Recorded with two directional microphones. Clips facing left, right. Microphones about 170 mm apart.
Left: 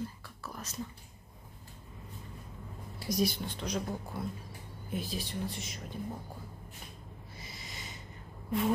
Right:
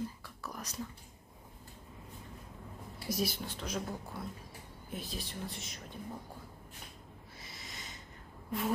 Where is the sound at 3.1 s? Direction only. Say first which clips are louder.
Left 4 dB; 5° right (ahead or behind).